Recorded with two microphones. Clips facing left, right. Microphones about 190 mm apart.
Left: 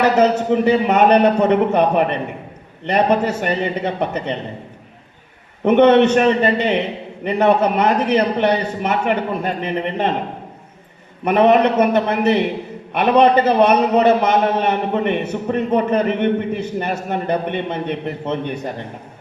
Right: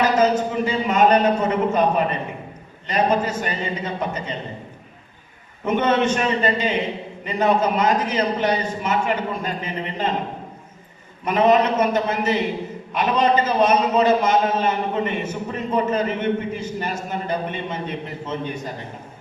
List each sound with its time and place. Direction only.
0.0 s a man's voice: 70° left (ahead or behind)
2.8 s a man's voice: 65° left (ahead or behind)
5.6 s a man's voice: 65° left (ahead or behind)
11.3 s a man's voice: 65° left (ahead or behind)